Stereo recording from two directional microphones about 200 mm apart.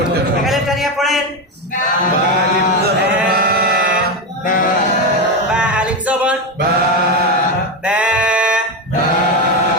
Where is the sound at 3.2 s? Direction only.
50° right (ahead or behind).